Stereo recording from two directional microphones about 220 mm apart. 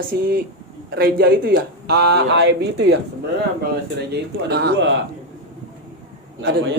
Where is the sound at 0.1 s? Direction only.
45° right (ahead or behind).